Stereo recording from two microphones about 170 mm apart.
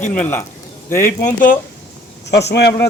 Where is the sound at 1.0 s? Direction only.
55° left (ahead or behind).